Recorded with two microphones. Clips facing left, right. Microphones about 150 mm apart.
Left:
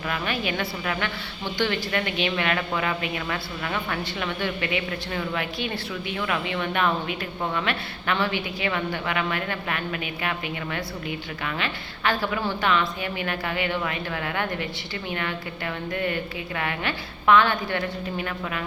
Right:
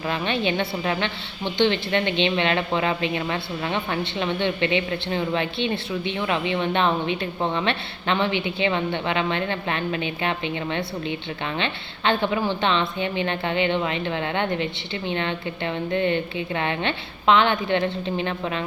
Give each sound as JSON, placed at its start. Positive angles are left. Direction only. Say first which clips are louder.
{"t": 0.1, "sound": "speech", "louder": "right 4 dB", "side_deg": -25}